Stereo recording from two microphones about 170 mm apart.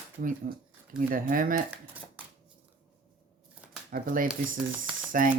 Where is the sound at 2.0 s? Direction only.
10° right (ahead or behind).